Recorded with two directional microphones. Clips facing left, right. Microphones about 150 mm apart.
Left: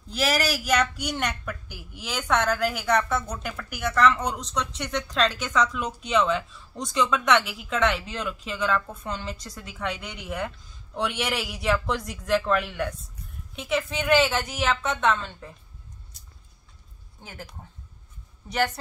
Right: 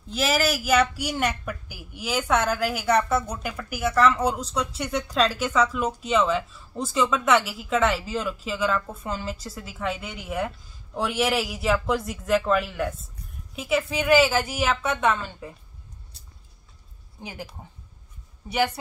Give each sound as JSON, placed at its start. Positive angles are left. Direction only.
{"t": 0.1, "sound": "a woman's voice", "side_deg": 0}
{"t": 17.2, "sound": "a woman's voice", "side_deg": -15}